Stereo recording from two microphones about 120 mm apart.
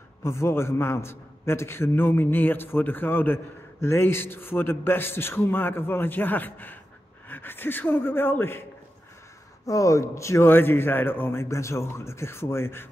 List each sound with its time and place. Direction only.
0.2 s a man's voice: 25° left (ahead or behind)
9.7 s a man's voice: 25° left (ahead or behind)